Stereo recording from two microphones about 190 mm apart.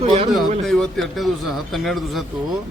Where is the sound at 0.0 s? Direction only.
30° right (ahead or behind).